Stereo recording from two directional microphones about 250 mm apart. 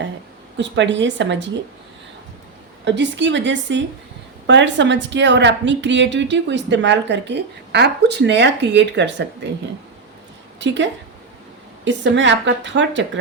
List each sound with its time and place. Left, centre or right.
0.5 s a woman's voice: right
2.8 s a woman's voice: right
11.9 s a woman's voice: right